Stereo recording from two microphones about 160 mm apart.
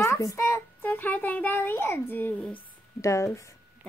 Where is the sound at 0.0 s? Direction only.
20° left (ahead or behind).